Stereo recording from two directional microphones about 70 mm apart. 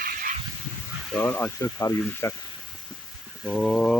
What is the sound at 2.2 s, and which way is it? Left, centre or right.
Speech, left.